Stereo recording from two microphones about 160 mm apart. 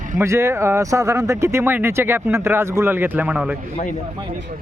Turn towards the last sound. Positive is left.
turn(degrees=-10)  # may be behind; listen again after turning